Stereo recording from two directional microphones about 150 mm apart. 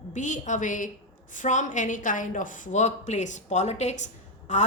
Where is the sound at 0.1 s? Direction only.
55° left (ahead or behind).